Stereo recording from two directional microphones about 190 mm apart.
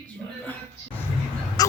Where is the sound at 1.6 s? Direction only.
20° left (ahead or behind).